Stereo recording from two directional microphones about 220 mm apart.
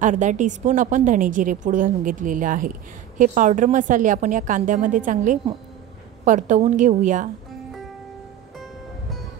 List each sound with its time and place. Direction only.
0.0 s a woman's voice: 35° right (ahead or behind)